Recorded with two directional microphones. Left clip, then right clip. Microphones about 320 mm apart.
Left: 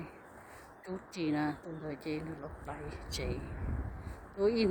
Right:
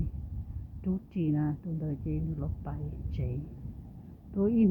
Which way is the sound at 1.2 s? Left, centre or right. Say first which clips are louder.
Right 1 dB; centre.